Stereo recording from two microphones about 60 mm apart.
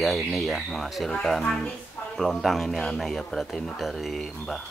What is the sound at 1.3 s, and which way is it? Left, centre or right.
Speech, centre.